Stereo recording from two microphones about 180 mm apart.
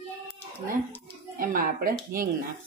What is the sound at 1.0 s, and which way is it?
A child's voice, 55° right (ahead or behind).